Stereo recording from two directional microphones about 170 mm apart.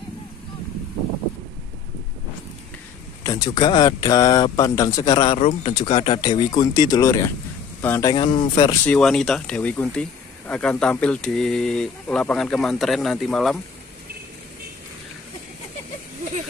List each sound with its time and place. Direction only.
3.3 s speech: 25° left (ahead or behind)
5.4 s speech: 40° left (ahead or behind)
5.8 s speech: 30° left (ahead or behind)
8.1 s speech: 25° left (ahead or behind)
8.8 s speech: 5° left (ahead or behind)